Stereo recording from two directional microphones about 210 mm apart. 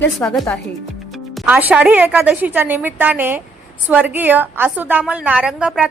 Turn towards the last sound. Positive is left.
turn(degrees=-5)  # may be behind; listen again after turning